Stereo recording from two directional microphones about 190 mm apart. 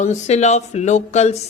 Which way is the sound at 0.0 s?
35° left (ahead or behind).